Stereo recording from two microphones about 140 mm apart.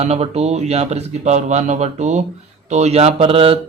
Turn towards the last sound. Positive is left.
turn(degrees=-45)  # may be behind; listen again after turning